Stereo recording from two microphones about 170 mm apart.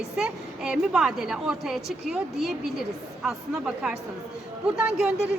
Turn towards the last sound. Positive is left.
turn(degrees=-5)  # may be behind; listen again after turning